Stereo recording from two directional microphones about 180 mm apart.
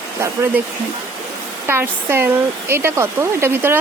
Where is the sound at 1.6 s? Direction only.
15° right (ahead or behind).